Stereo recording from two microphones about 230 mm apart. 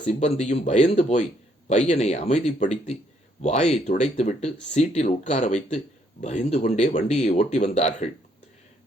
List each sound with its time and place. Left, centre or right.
0.0 s speech: left